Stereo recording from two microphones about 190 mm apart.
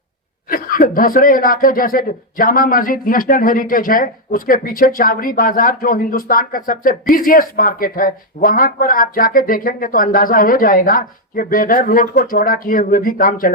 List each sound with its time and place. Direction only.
0.4 s speech: 50° left (ahead or behind)